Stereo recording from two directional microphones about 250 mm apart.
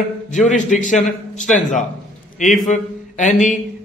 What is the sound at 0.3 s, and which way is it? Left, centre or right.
Speech, left.